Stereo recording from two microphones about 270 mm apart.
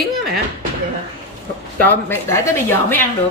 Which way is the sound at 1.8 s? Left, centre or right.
Centre.